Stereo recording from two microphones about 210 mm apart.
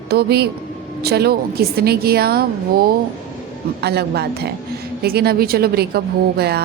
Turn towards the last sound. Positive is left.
turn(degrees=-50)  # may be behind; listen again after turning